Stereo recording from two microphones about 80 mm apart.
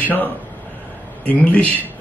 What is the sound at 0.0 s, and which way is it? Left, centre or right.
A man's voice, left.